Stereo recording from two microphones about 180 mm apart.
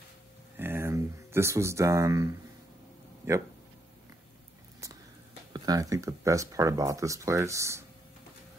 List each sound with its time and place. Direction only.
0.6 s speech: 15° right (ahead or behind)
5.5 s speech: 20° right (ahead or behind)